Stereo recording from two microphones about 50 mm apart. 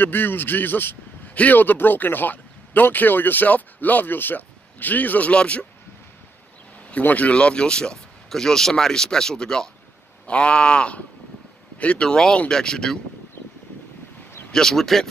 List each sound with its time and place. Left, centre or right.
0.0 s a man's voice: left
5.3 s speech: left
7.0 s speech: left; by 13.0 s centre
14.5 s speech: centre